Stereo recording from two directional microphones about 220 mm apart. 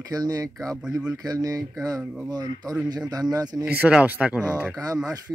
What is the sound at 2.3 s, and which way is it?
Speech, 20° right (ahead or behind).